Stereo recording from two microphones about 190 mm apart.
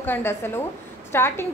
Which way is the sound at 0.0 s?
10° left (ahead or behind).